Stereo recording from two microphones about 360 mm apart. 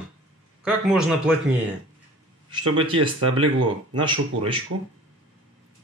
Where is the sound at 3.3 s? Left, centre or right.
Right.